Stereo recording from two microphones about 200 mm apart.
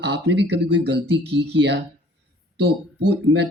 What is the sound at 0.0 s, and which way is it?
Speech, 60° right (ahead or behind).